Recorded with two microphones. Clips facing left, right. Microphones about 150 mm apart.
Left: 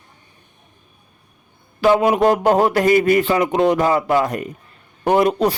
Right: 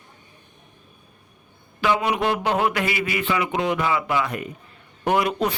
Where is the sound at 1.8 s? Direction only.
40° left (ahead or behind).